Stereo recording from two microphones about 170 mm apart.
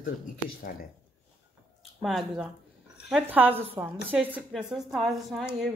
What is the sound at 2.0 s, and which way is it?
A woman's voice, centre (ahead or behind).